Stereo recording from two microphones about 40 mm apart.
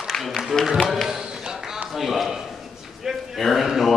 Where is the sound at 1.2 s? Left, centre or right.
Centre.